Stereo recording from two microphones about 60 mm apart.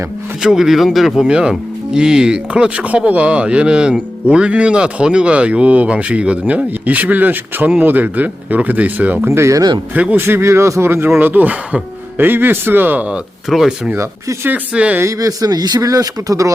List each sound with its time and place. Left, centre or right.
0.4 s speech: centre; by 9.3 s right
9.3 s a man's voice: right
9.9 s speech: right
10.2 s a man's voice: right
11.2 s speech: right
13.5 s speech: centre
13.9 s a man's voice: right
14.4 s speech: right
15.0 s speech: right